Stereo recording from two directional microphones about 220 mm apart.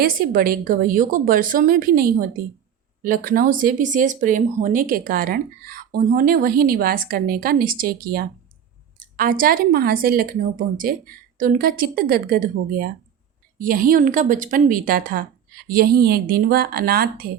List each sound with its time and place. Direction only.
0.0 s speech: 40° right (ahead or behind)